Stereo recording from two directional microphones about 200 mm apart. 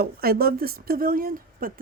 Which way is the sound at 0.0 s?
50° right (ahead or behind).